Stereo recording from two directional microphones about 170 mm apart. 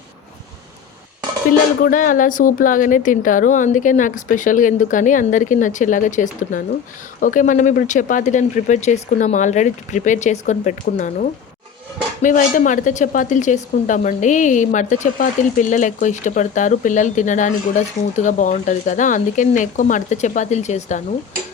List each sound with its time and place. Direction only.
1.8 s speech: 50° left (ahead or behind)